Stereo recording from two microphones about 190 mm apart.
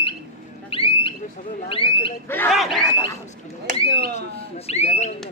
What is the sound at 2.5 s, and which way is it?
Speech, centre (ahead or behind).